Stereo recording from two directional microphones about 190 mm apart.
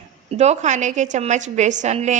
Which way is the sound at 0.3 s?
35° right (ahead or behind).